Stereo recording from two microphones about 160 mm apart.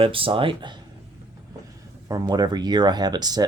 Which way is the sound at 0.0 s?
35° right (ahead or behind).